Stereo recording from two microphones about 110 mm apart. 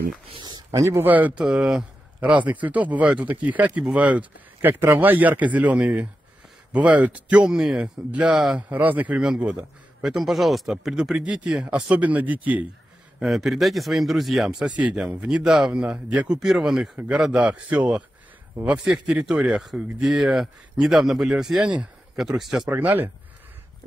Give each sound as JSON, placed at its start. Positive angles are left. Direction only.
{"t": 0.4, "sound": "speech", "side_deg": -40}
{"t": 1.0, "sound": "speech", "side_deg": -15}
{"t": 13.2, "sound": "speech", "side_deg": 0}
{"t": 22.7, "sound": "speech", "side_deg": -15}